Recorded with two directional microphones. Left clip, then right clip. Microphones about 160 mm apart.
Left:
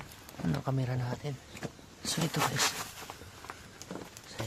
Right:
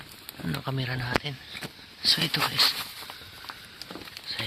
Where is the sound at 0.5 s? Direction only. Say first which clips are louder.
Right 5 dB; 10° right (ahead or behind).